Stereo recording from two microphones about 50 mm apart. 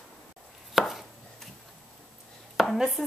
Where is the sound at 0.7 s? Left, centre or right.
Centre.